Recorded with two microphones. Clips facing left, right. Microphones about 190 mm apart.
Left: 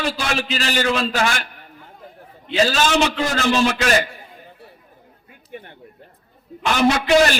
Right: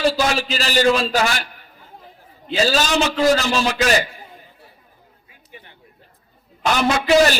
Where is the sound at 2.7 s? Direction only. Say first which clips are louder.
Even; 40° right (ahead or behind).